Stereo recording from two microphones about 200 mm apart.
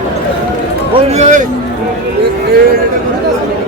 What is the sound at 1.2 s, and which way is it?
Speech, 40° right (ahead or behind).